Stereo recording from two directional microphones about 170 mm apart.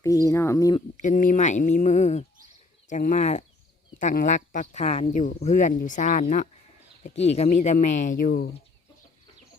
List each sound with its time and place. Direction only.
0.0 s speech: 20° left (ahead or behind)
1.0 s speech: 50° left (ahead or behind)